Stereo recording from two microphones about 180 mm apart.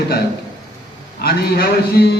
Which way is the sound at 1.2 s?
60° left (ahead or behind).